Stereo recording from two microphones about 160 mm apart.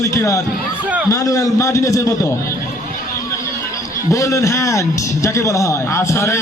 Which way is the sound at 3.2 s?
20° left (ahead or behind).